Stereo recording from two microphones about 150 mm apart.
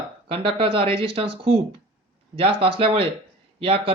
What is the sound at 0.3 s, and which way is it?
Speech, 35° right (ahead or behind).